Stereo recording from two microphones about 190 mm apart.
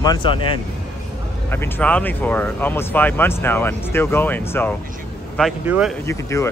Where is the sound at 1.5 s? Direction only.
10° left (ahead or behind).